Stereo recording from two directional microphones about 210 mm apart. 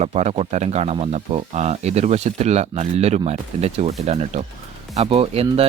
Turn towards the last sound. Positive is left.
turn(degrees=-25)  # may be behind; listen again after turning